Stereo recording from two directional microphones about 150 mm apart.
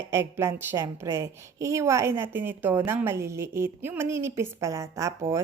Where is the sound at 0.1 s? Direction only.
15° right (ahead or behind).